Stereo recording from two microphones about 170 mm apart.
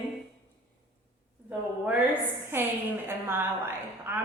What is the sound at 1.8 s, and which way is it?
A woman's voice, 10° right (ahead or behind).